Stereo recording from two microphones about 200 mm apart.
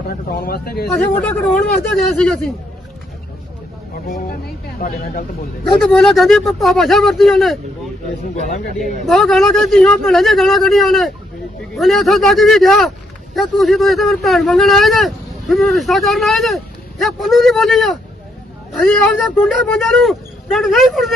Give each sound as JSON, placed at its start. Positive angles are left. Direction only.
{"t": 0.1, "sound": "speech", "side_deg": 50}
{"t": 0.9, "sound": "speech", "side_deg": 10}
{"t": 4.8, "sound": "speech", "side_deg": 45}
{"t": 5.8, "sound": "speech", "side_deg": 5}
{"t": 8.8, "sound": "speech", "side_deg": 0}